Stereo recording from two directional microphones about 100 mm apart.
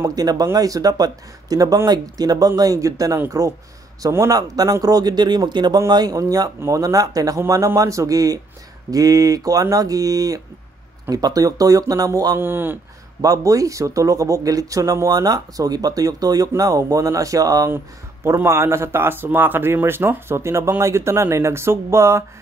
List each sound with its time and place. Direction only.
0.0 s speech: 40° right (ahead or behind)
12.4 s speech: 20° right (ahead or behind)
13.2 s speech: 35° right (ahead or behind)
18.2 s speech: 25° right (ahead or behind)